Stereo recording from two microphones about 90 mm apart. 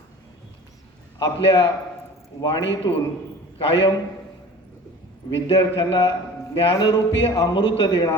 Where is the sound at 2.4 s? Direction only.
70° left (ahead or behind).